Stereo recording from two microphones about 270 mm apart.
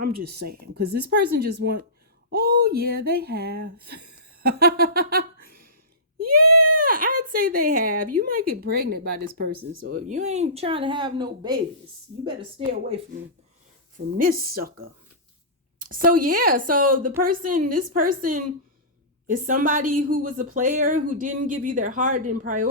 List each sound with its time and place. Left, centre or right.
0.2 s speech: right
6.5 s a sound: right
6.7 s speech: right
14.2 s speech: right